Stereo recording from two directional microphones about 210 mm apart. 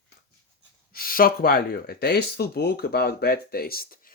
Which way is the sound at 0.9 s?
45° left (ahead or behind).